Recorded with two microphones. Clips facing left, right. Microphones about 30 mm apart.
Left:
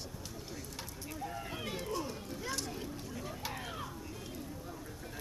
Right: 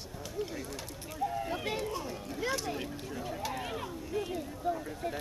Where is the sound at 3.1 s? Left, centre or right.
Right.